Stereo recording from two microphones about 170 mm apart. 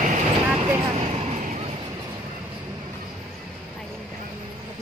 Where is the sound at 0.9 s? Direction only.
40° right (ahead or behind).